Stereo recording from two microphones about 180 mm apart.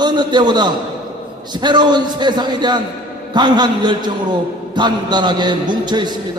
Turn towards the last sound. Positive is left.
turn(degrees=-25)  # may be behind; listen again after turning